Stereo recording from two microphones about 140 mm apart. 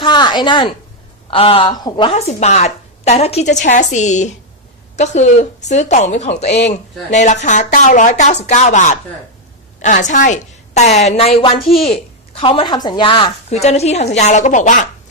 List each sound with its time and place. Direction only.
0.0 s a sound: 30° left (ahead or behind)
1.3 s a woman's voice: 40° left (ahead or behind)
2.1 s a woman's voice: 50° left (ahead or behind); by 13.6 s 35° left (ahead or behind)
13.6 s a woman's voice: 50° left (ahead or behind)